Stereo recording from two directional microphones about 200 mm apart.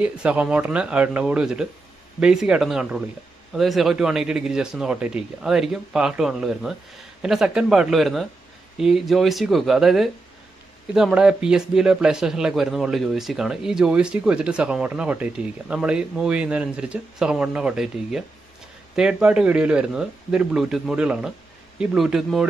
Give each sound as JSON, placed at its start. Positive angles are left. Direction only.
{"t": 0.0, "sound": "speech", "side_deg": -5}